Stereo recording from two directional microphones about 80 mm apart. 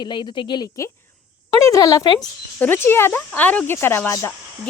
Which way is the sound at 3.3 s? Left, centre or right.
Centre.